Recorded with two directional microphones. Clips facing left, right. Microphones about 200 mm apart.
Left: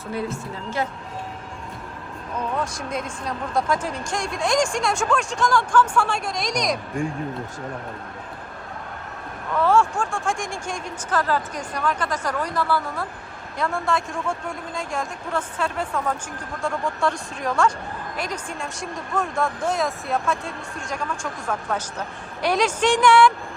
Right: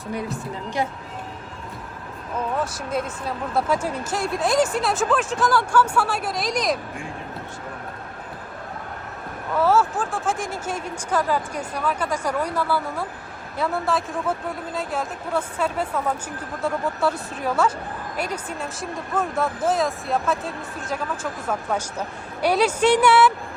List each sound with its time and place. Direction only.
0.3 s speech: 15° right (ahead or behind)
2.7 s speech: 5° right (ahead or behind)
9.6 s speech: 5° right (ahead or behind)